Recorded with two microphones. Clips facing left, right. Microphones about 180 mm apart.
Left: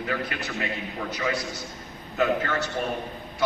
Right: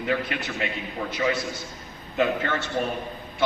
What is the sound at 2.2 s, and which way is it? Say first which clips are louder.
Speech: even; 25° right (ahead or behind).